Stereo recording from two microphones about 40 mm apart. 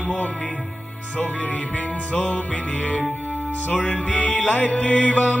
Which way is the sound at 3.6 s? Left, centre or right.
Left.